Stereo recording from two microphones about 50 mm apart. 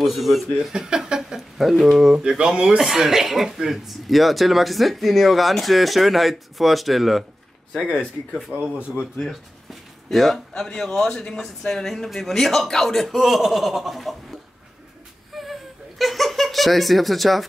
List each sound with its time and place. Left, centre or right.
0.0 s speech: centre
0.6 s speech: centre
2.1 s speech: centre
9.2 s speech: centre
15.3 s a sound: centre